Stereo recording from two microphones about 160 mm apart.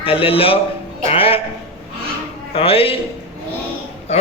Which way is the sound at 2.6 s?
35° left (ahead or behind).